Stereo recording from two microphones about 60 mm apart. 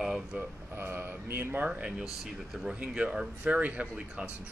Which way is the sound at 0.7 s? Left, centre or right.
Right.